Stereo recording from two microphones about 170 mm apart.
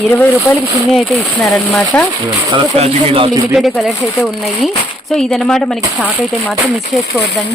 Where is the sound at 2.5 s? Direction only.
35° right (ahead or behind).